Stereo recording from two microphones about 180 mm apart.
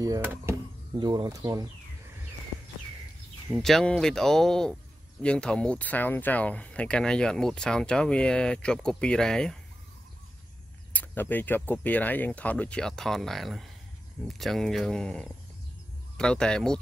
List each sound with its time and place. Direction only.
0.0 s speech: 15° right (ahead or behind)
3.5 s speech: centre (ahead or behind)
10.9 s speech: 10° left (ahead or behind)